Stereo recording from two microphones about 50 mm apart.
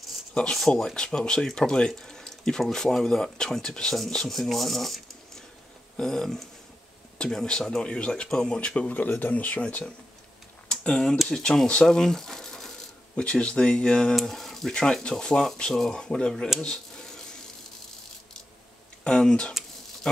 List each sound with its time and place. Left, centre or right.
0.3 s speech: centre
0.6 s speech: centre
8.5 s speech: left
10.7 s speech: centre
13.1 s speech: left
14.2 s a sound: centre
14.7 s speech: centre
19.0 s speech: centre